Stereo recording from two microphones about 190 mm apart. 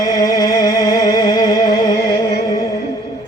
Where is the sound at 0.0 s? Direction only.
20° left (ahead or behind).